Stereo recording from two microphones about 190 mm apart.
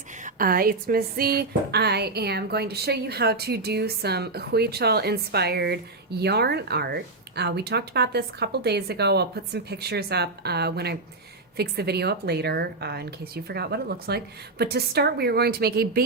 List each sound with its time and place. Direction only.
0.2 s speech: 45° right (ahead or behind)